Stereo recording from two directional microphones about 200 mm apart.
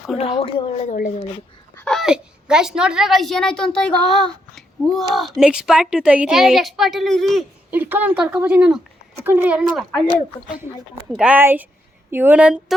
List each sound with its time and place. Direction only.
0.2 s a woman's voice: 30° left (ahead or behind)
1.7 s a woman's voice: 5° left (ahead or behind)
11.1 s speech: 5° right (ahead or behind)